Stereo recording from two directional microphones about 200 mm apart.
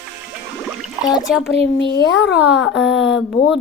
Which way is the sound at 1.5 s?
60° left (ahead or behind).